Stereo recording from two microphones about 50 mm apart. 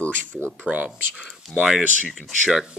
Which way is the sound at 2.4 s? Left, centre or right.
Centre.